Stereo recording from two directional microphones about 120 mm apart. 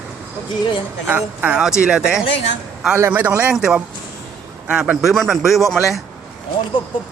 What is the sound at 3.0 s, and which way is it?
Speech, 20° right (ahead or behind).